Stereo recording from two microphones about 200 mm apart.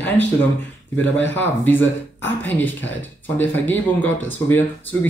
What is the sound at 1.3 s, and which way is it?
Speech, 10° left (ahead or behind).